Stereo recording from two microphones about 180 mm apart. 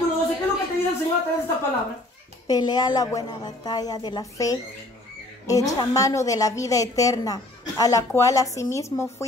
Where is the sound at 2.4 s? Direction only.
20° left (ahead or behind).